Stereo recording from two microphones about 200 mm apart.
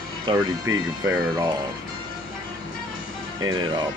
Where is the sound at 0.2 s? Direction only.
20° right (ahead or behind).